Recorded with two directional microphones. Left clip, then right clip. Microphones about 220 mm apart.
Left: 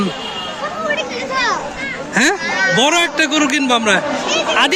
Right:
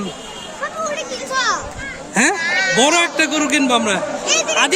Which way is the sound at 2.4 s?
20° right (ahead or behind).